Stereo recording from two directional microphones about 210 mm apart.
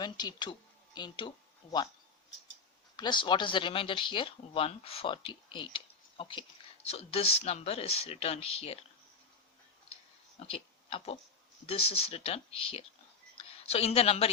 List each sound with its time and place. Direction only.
0.0 s speech: 20° left (ahead or behind)
2.9 s speech: 20° left (ahead or behind)
10.4 s speech: 25° left (ahead or behind)
13.3 s a sound: 30° left (ahead or behind)